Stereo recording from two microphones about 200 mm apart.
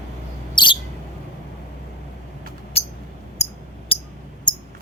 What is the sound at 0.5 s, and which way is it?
Bird, 25° left (ahead or behind).